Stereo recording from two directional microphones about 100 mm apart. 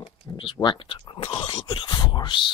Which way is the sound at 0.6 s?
45° left (ahead or behind).